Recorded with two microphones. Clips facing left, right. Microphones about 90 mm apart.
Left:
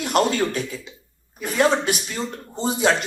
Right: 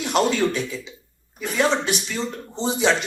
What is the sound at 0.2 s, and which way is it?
Speech, 45° left (ahead or behind).